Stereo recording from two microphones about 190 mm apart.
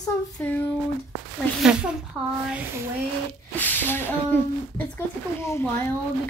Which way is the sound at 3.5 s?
10° left (ahead or behind).